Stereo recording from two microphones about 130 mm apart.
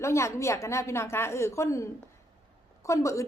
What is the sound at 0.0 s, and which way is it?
A woman's voice, 20° left (ahead or behind).